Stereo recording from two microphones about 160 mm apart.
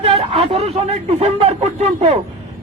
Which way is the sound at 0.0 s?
40° right (ahead or behind).